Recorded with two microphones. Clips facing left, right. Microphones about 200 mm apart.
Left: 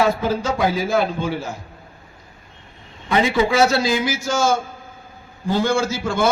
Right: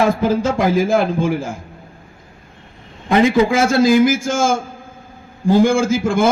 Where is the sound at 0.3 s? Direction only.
50° right (ahead or behind).